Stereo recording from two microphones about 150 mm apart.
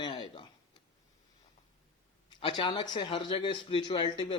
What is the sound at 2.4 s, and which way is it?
Speech, 35° left (ahead or behind).